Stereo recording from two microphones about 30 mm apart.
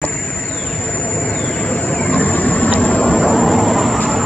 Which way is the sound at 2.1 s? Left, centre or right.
Left.